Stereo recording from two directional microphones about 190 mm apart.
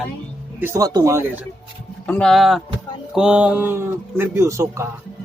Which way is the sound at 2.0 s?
5° left (ahead or behind).